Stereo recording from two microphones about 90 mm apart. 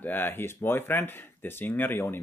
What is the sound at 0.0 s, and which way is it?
Speech, 20° left (ahead or behind).